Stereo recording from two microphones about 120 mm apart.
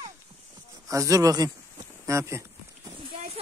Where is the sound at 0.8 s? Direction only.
30° right (ahead or behind).